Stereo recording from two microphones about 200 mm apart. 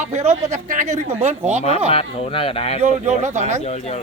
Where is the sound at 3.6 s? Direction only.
35° left (ahead or behind).